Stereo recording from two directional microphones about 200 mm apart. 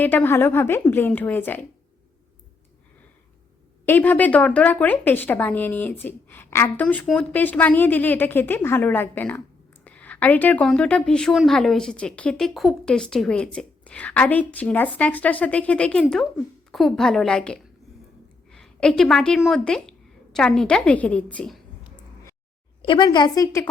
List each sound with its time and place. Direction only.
0.0 s a woman's voice: 10° left (ahead or behind)
3.8 s a woman's voice: 10° left (ahead or behind)
22.8 s a woman's voice: 25° left (ahead or behind)